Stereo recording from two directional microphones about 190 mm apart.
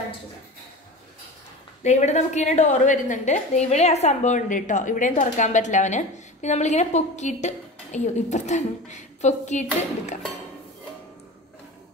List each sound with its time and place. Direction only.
1.8 s a woman's voice: 40° left (ahead or behind)